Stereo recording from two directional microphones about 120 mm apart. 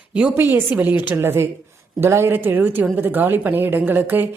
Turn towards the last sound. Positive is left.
turn(degrees=-15)  # may be behind; listen again after turning